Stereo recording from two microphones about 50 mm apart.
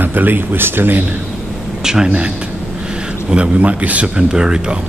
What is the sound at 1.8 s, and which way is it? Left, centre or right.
Speech, centre.